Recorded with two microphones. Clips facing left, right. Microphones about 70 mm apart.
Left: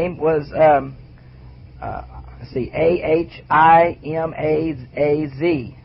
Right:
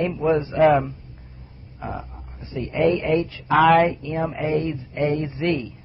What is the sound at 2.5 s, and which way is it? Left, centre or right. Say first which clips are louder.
A man's voice: left 4 dB; centre.